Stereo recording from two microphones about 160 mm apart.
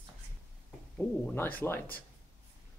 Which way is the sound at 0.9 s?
10° left (ahead or behind).